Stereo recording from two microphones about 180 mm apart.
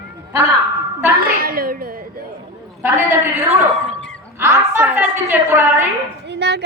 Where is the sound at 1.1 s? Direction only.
55° right (ahead or behind).